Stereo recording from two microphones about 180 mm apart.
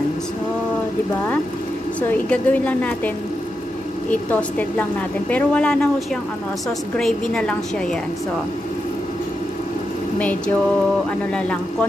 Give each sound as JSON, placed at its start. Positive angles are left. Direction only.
{"t": 2.0, "sound": "a woman's voice", "side_deg": 5}
{"t": 4.1, "sound": "a woman's voice", "side_deg": 10}
{"t": 7.0, "sound": "a woman's voice", "side_deg": 5}